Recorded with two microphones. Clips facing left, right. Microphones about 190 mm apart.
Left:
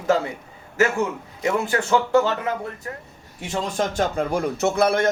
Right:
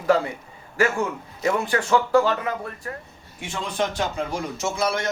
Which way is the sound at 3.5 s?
40° left (ahead or behind).